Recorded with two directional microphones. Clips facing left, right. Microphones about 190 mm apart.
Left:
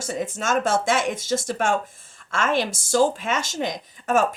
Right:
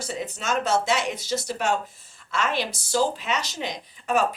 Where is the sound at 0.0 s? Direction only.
45° left (ahead or behind).